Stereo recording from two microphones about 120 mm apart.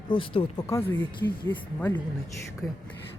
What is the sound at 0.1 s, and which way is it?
Speech, 45° left (ahead or behind).